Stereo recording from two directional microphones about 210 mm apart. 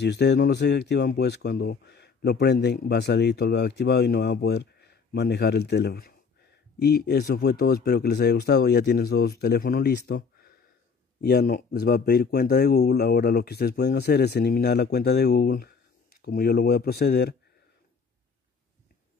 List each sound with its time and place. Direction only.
0.0 s speech: 55° left (ahead or behind)